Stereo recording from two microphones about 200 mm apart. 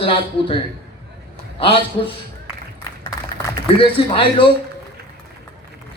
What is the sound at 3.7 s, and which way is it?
Speech, 25° left (ahead or behind).